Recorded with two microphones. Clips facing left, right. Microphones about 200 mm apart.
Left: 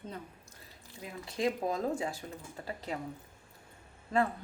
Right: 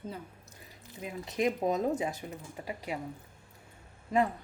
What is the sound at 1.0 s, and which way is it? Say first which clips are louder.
A woman's voice: right 3 dB; 20° right (ahead or behind).